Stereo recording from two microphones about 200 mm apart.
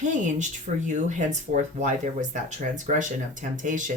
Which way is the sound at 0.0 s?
40° right (ahead or behind).